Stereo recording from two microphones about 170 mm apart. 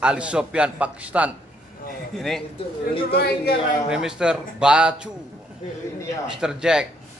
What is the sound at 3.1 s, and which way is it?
Speech, 65° left (ahead or behind).